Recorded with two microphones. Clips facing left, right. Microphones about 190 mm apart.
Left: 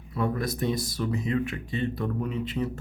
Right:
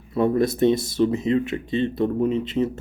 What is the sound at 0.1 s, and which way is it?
Speech, 25° right (ahead or behind).